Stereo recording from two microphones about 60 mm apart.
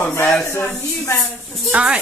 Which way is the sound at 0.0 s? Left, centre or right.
Left.